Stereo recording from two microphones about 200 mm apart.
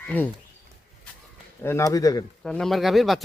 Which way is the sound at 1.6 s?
15° left (ahead or behind).